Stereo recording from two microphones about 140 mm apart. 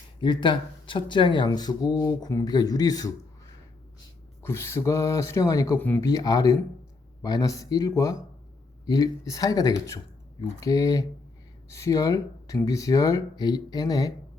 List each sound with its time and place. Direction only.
0.2 s speech: 35° left (ahead or behind)
4.4 s speech: 20° left (ahead or behind)
6.1 s speech: 25° left (ahead or behind)